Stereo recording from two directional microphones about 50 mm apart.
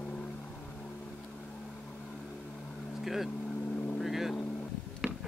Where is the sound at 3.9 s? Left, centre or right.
Centre.